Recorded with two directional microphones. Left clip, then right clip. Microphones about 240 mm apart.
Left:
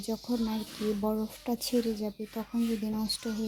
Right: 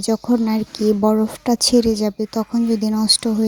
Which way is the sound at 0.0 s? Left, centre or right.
Right.